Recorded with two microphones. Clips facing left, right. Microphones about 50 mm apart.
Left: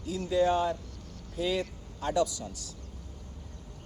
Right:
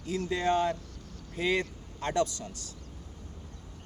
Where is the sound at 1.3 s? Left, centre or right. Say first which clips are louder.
Right 1 dB; right.